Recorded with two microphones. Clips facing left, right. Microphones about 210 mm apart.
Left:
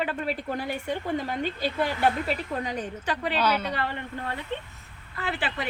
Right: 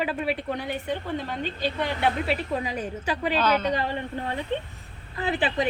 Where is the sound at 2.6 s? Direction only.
10° right (ahead or behind).